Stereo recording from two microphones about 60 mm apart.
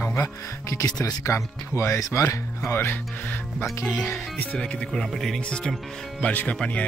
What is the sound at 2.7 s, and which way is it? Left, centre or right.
Speech, left.